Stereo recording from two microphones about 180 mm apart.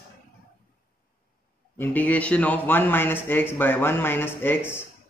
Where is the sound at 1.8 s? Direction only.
10° left (ahead or behind).